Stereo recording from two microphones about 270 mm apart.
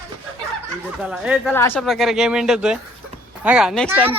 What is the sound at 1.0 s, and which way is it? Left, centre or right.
Speech, centre.